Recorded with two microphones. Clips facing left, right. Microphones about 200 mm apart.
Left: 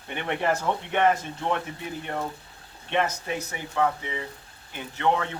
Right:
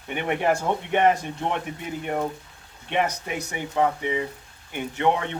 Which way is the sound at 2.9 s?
15° right (ahead or behind).